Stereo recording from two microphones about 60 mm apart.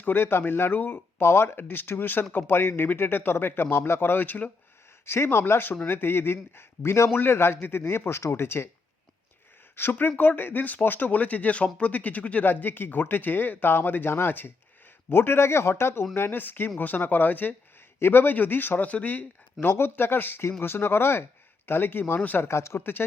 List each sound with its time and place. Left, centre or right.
0.0 s speech: left
1.2 s speech: left
5.0 s a man's voice: left
7.1 s a man's voice: left
9.7 s a man's voice: left
22.4 s a man's voice: left